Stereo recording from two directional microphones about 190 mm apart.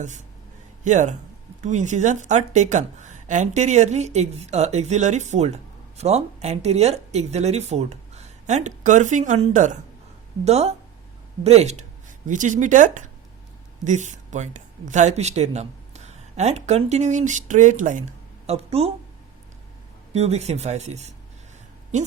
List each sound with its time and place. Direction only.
0.9 s a woman's voice: 40° right (ahead or behind)
20.1 s a woman's voice: 35° right (ahead or behind)